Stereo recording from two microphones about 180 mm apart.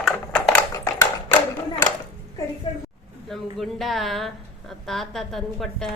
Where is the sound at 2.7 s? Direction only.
30° left (ahead or behind).